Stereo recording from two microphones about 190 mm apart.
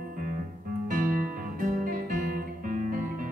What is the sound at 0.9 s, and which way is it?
Guitar, 45° right (ahead or behind).